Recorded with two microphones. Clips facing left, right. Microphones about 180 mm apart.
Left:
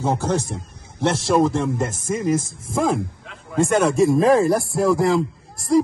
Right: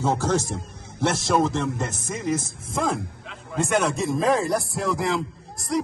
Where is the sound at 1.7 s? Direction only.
55° left (ahead or behind).